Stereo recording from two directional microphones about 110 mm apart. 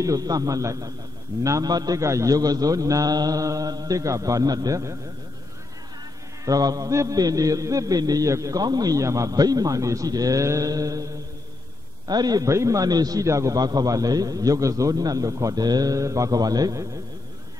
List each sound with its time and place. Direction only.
0.0 s a man's voice: 35° right (ahead or behind)
6.4 s a man's voice: 35° right (ahead or behind)
12.1 s a man's voice: 35° right (ahead or behind)